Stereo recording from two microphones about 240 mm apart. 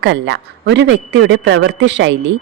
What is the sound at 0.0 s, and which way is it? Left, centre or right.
A woman's voice, right.